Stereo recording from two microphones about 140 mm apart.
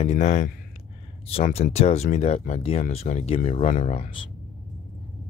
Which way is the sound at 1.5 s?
45° left (ahead or behind).